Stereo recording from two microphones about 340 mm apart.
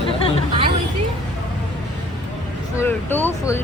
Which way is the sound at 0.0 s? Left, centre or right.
Centre.